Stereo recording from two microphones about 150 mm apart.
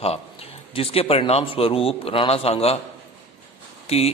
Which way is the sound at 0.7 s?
40° left (ahead or behind).